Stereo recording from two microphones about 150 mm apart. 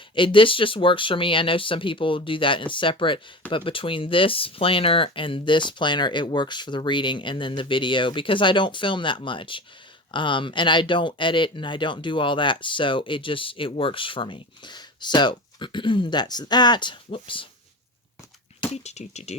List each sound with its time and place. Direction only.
0.1 s speech: 35° left (ahead or behind)
18.7 s speech: 45° left (ahead or behind)